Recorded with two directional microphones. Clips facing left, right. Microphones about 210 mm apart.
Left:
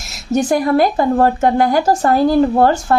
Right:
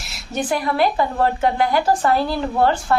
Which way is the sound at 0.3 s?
45° left (ahead or behind).